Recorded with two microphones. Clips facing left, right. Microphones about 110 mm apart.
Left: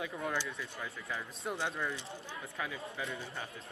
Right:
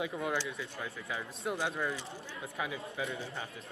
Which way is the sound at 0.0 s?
15° right (ahead or behind).